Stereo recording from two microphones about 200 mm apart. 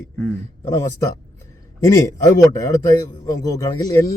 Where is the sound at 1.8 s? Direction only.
15° left (ahead or behind).